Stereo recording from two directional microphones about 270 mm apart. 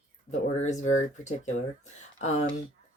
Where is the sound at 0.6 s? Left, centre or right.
Left.